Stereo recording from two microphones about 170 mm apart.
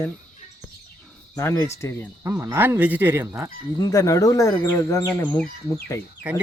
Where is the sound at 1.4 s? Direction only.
15° left (ahead or behind).